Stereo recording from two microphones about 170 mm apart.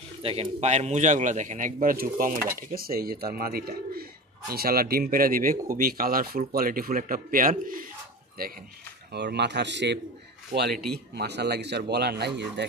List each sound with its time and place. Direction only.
0.2 s a man's voice: 35° right (ahead or behind); by 7.8 s 55° right (ahead or behind)
9.1 s speech: 80° right
10.9 s speech: 75° right (ahead or behind)